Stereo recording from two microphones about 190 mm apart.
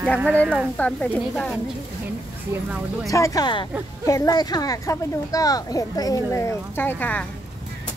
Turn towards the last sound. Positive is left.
turn(degrees=10)  # may be behind; listen again after turning